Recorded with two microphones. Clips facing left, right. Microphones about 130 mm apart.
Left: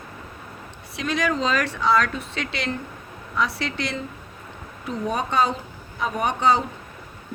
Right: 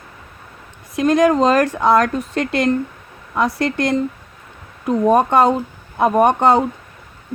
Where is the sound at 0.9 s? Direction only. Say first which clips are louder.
Right 11 dB; 50° right (ahead or behind).